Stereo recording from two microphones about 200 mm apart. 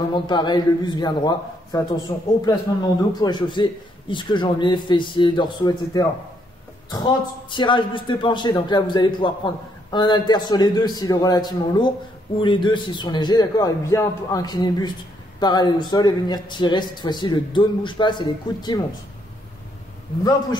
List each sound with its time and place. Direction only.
0.1 s a man's voice: 20° left (ahead or behind)